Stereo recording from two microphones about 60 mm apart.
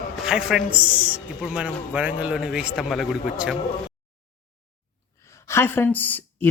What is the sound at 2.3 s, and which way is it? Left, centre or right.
Speech, centre.